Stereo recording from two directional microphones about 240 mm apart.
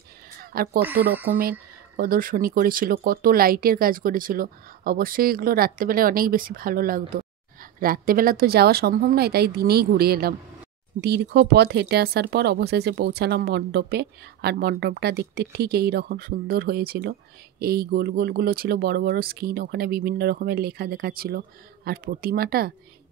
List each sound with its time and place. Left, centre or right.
0.4 s speech: right
0.8 s speech: centre
1.4 s speech: right